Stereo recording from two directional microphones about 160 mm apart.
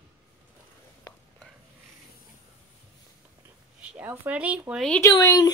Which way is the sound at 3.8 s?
10° right (ahead or behind).